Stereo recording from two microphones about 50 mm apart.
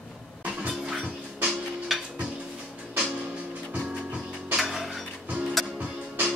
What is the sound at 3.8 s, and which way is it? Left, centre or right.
Music, centre.